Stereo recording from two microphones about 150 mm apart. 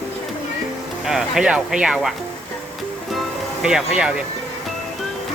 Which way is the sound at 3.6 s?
5° right (ahead or behind).